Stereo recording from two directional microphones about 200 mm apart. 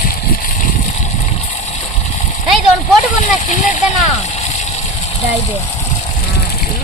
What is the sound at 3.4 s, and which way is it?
Speech, 40° left (ahead or behind).